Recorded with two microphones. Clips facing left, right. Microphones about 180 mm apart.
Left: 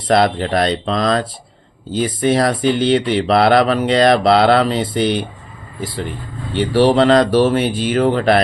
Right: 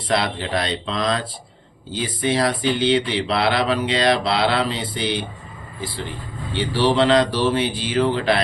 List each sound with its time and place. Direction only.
0.1 s speech: 45° left (ahead or behind)
6.7 s speech: 45° left (ahead or behind)